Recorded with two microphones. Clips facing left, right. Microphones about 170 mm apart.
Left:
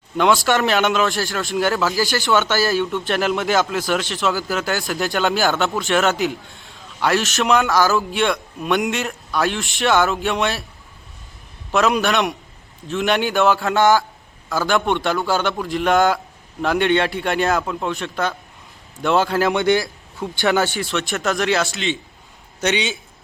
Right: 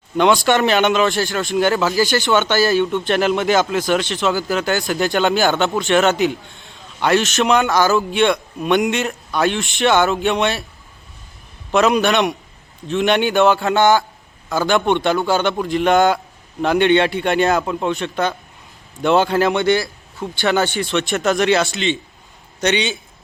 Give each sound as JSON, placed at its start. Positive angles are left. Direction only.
{"t": 0.2, "sound": "a man's voice", "side_deg": 0}
{"t": 11.7, "sound": "a man's voice", "side_deg": 0}
{"t": 19.6, "sound": "a man's voice", "side_deg": 15}
{"t": 20.5, "sound": "a man's voice", "side_deg": 5}